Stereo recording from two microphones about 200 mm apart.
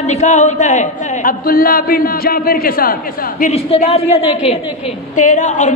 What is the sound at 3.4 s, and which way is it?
Speech, 35° left (ahead or behind).